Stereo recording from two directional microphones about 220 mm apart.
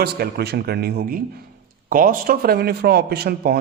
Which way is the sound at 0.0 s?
45° right (ahead or behind).